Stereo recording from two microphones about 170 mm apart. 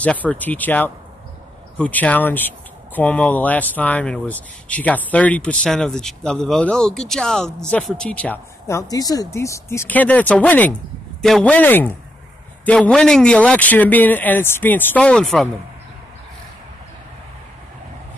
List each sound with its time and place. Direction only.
0.0 s speech: 10° left (ahead or behind)